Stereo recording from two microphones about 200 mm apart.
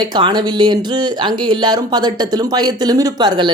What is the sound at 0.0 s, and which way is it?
Speech, 20° right (ahead or behind).